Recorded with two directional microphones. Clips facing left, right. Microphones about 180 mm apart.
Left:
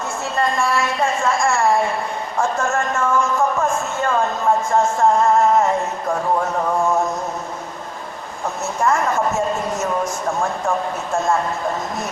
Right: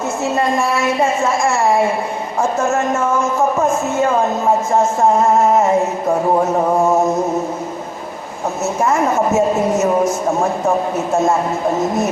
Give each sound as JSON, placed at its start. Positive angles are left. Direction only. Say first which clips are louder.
{"t": 0.8, "sound": "speech", "louder": "right 4 dB", "side_deg": -20}
{"t": 8.6, "sound": "speech", "louder": "right 3 dB", "side_deg": -20}